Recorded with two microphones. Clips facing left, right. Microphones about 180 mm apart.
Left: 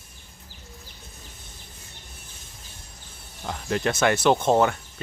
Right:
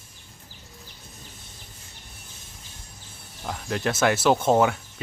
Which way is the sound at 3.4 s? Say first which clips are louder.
Left 2 dB; centre (ahead or behind).